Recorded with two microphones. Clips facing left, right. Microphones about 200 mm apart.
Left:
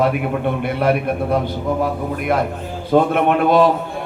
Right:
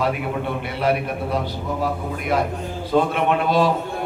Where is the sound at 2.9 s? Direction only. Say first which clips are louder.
Left 4 dB; 55° left (ahead or behind).